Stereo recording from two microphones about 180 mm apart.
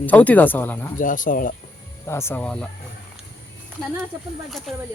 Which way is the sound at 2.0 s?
15° left (ahead or behind).